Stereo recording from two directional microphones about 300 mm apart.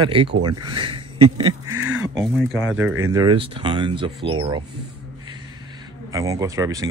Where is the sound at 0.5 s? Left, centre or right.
Centre.